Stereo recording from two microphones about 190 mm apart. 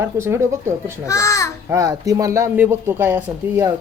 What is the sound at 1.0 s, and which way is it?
Speech, 15° left (ahead or behind).